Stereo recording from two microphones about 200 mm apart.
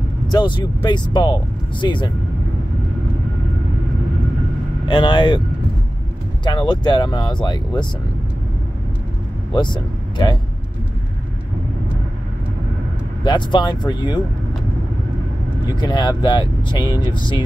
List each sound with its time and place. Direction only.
0.3 s speech: 20° left (ahead or behind)
4.8 s speech: 25° left (ahead or behind)
6.4 s speech: 20° left (ahead or behind)
9.5 s speech: 20° left (ahead or behind)
13.2 s speech: 25° left (ahead or behind)
15.7 s speech: 20° left (ahead or behind)